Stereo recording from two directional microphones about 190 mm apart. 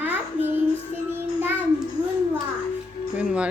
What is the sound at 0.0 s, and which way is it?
Child singing, 10° right (ahead or behind).